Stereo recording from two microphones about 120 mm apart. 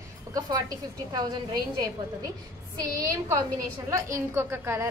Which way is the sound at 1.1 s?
35° right (ahead or behind).